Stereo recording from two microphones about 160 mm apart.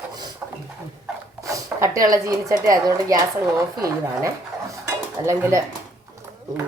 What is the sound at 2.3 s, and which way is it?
Speech, 20° right (ahead or behind).